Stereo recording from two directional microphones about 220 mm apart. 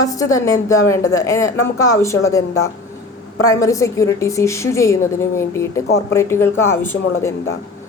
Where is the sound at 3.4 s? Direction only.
15° left (ahead or behind).